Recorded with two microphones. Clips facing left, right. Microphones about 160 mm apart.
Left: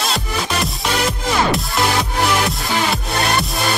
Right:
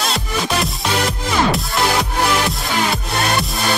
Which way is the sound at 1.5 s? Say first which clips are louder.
Even; centre (ahead or behind).